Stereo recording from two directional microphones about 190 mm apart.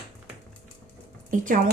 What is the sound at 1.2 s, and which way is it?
Speech, 45° right (ahead or behind).